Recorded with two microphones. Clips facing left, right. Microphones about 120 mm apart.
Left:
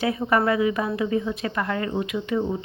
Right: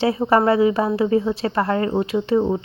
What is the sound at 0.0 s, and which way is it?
Speech, 30° right (ahead or behind).